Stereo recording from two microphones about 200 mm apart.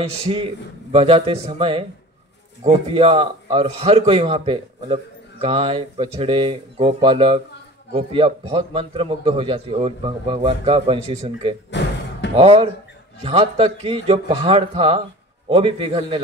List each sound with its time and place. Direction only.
0.9 s a man's voice: 30° right (ahead or behind)
11.7 s speech: 60° left (ahead or behind)
12.4 s a man's voice: 30° right (ahead or behind)